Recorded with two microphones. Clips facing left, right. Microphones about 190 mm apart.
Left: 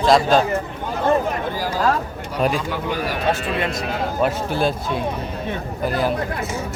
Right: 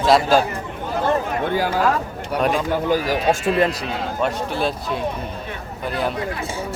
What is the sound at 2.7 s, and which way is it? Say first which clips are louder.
Speech: right 5 dB; 45° right (ahead or behind).